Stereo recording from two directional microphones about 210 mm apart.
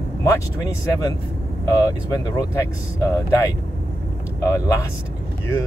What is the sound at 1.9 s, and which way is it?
Speech, 15° left (ahead or behind).